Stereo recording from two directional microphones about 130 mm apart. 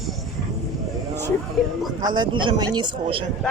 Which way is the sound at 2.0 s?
30° right (ahead or behind).